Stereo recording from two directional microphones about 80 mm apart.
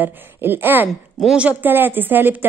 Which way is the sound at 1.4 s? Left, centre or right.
Right.